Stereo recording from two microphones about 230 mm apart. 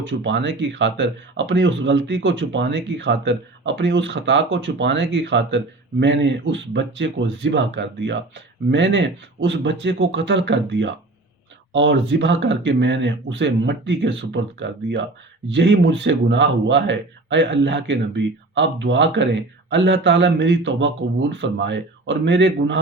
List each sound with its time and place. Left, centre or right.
0.0 s speech: right